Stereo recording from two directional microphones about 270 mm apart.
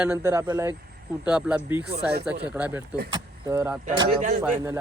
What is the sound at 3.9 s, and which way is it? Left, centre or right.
Speech, right.